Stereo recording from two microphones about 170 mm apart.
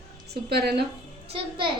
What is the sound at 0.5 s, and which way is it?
Speech, 70° right (ahead or behind).